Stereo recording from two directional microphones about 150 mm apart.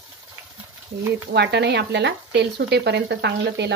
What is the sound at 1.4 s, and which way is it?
Speech, 90° right.